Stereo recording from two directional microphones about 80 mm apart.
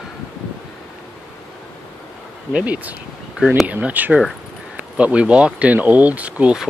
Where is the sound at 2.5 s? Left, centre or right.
Centre.